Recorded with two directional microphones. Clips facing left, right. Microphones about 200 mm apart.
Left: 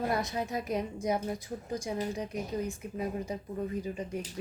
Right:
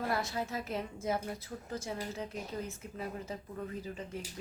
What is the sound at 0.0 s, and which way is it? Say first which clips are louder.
A woman's voice: left 3 dB; 15° left (ahead or behind).